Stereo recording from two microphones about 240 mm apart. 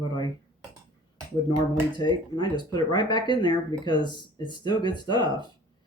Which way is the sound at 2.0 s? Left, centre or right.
Centre.